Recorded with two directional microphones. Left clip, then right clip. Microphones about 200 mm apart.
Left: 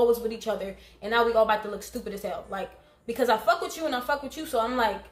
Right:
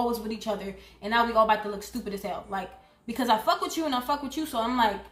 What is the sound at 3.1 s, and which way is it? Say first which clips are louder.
A woman's voice: left 1 dB; centre (ahead or behind).